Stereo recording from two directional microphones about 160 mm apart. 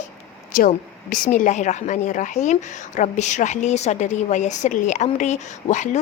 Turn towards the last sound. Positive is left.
turn(degrees=50)  # may be behind; listen again after turning